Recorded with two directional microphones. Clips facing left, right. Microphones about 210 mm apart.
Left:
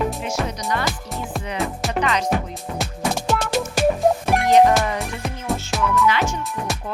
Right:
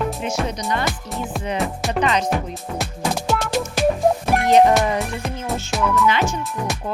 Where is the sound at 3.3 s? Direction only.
Centre (ahead or behind).